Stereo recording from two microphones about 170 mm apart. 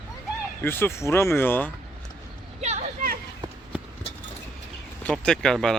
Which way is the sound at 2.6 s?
40° right (ahead or behind).